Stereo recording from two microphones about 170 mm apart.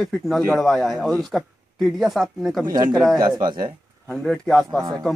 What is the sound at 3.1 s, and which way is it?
Speech, 25° right (ahead or behind).